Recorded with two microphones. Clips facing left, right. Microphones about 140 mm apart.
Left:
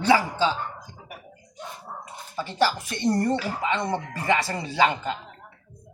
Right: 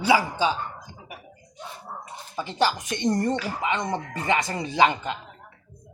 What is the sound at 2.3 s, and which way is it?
Speech, 15° right (ahead or behind).